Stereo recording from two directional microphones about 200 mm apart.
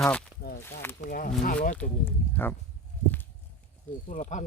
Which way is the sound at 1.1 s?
45° left (ahead or behind).